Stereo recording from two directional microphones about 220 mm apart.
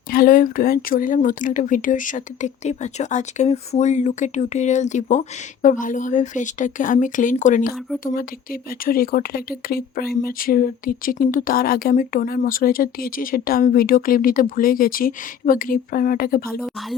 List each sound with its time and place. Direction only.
0.1 s speech: 40° left (ahead or behind)